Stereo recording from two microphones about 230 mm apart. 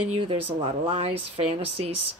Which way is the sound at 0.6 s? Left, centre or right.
Right.